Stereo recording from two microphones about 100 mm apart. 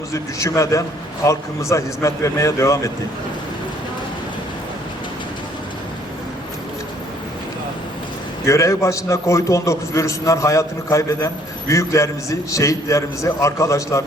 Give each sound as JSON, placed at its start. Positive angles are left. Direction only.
{"t": 0.1, "sound": "a man's voice", "side_deg": 30}
{"t": 8.4, "sound": "a man's voice", "side_deg": 30}